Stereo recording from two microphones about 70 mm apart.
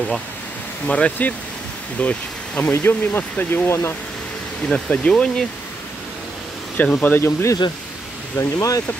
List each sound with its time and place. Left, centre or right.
0.8 s speech: centre; by 3.9 s left
4.6 s speech: centre
6.8 s speech: left
8.4 s speech: left